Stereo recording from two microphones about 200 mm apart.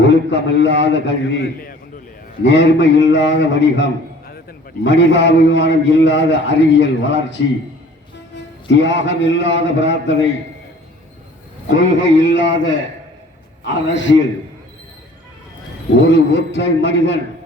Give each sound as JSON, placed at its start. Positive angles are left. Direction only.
{"t": 0.1, "sound": "a man's voice", "side_deg": 60}
{"t": 11.7, "sound": "a man's voice", "side_deg": 65}
{"t": 13.7, "sound": "a man's voice", "side_deg": 65}
{"t": 16.0, "sound": "a man's voice", "side_deg": 60}